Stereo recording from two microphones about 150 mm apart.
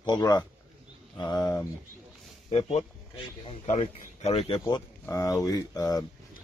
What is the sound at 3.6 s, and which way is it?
Speech, 50° left (ahead or behind).